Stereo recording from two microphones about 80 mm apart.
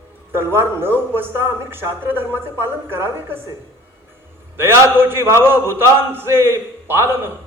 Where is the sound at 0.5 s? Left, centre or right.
Right.